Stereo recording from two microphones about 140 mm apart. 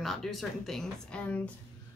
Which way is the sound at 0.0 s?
Centre (ahead or behind).